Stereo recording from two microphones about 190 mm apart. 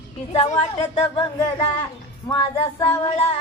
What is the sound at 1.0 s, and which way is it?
Female singing, 20° left (ahead or behind).